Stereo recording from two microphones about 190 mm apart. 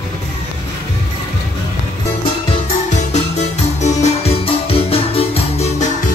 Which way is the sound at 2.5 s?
35° left (ahead or behind).